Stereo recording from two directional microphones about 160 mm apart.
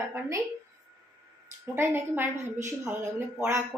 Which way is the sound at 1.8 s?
15° right (ahead or behind).